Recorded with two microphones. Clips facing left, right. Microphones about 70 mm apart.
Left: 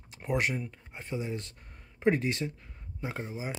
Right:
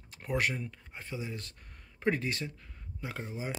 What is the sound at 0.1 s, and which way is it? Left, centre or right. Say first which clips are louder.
Speech: left 2 dB; centre.